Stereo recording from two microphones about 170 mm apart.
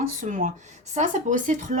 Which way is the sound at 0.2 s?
45° right (ahead or behind).